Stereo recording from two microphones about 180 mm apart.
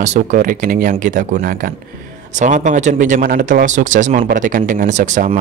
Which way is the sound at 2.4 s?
45° right (ahead or behind).